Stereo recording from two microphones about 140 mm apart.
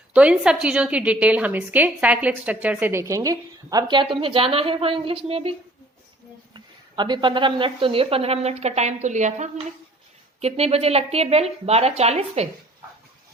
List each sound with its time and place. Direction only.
0.1 s a woman's voice: 10° right (ahead or behind); by 9.5 s 60° right (ahead or behind)
10.4 s a woman's voice: 45° right (ahead or behind)